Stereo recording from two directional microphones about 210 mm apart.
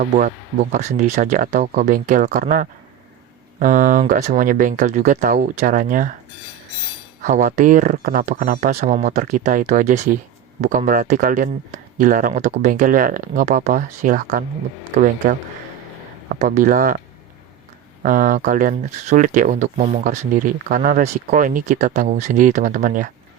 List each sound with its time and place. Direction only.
0.2 s speech: 35° right (ahead or behind)
7.2 s speech: 35° right (ahead or behind)
18.0 s speech: 40° right (ahead or behind)